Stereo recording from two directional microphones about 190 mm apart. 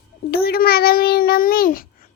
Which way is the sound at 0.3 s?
55° left (ahead or behind).